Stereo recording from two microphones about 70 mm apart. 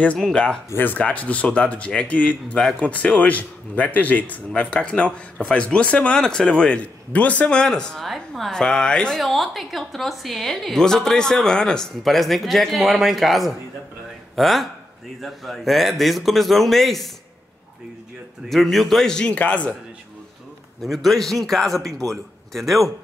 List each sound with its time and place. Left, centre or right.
0.3 s speech: centre
0.7 s speech: left; by 9.2 s centre
9.2 s a woman's voice: centre
18.5 s speech: centre
20.8 s a woman's voice: centre